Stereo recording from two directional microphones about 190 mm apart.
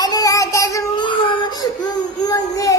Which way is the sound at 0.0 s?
20° left (ahead or behind).